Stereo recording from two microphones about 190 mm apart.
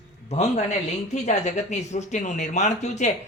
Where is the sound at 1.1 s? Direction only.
40° left (ahead or behind).